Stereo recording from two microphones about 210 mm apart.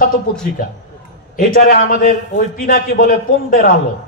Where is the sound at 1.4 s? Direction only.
40° left (ahead or behind).